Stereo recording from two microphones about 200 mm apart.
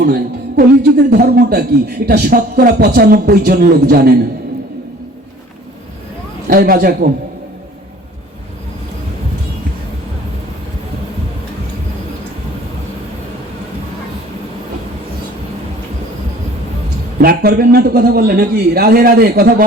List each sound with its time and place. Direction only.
0.0 s speech: 50° right (ahead or behind)
6.5 s speech: 45° right (ahead or behind)
17.2 s speech: 50° right (ahead or behind)